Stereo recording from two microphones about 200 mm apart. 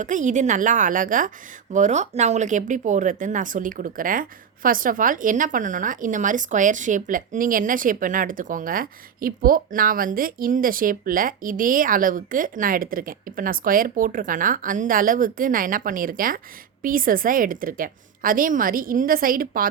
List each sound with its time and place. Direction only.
0.0 s a woman's voice: 40° right (ahead or behind)